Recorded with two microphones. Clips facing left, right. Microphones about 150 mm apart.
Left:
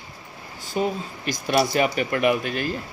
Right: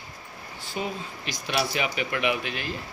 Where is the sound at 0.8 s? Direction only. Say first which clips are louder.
Left 7 dB; 45° left (ahead or behind).